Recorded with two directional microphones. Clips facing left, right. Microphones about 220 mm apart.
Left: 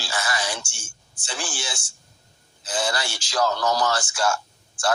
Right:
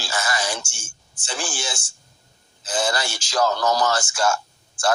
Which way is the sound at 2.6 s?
45° right (ahead or behind).